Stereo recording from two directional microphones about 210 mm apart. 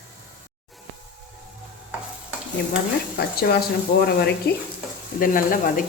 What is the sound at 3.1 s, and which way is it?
Speech, 50° left (ahead or behind).